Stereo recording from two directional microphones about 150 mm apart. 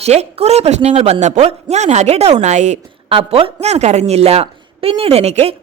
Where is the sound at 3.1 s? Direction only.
40° right (ahead or behind).